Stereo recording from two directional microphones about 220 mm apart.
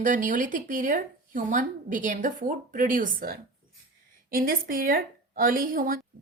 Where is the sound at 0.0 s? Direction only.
35° right (ahead or behind).